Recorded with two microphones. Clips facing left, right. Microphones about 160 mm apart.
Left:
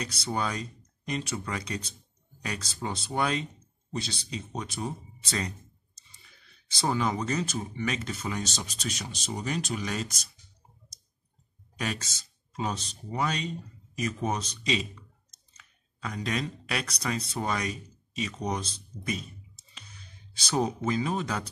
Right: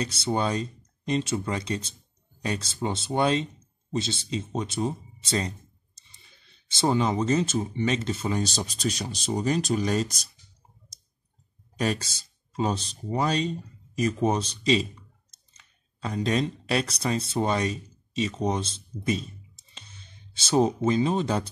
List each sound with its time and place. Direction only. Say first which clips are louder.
0.0 s speech: right 5 dB; 25° right (ahead or behind)
11.8 s speech: right 6 dB; 35° right (ahead or behind)